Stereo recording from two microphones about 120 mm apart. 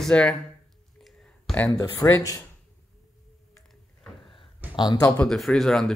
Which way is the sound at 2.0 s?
25° left (ahead or behind).